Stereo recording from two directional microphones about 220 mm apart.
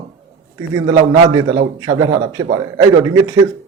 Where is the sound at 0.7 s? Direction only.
15° right (ahead or behind).